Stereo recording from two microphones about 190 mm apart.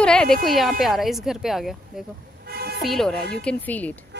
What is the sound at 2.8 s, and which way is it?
Speech, centre (ahead or behind).